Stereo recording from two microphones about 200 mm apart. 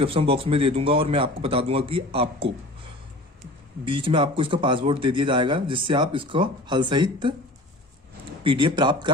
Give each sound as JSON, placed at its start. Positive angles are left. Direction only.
{"t": 0.0, "sound": "speech", "side_deg": -30}
{"t": 3.8, "sound": "speech", "side_deg": -25}
{"t": 8.4, "sound": "speech", "side_deg": -25}